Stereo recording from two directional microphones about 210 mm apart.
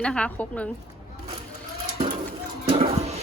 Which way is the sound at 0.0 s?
5° left (ahead or behind).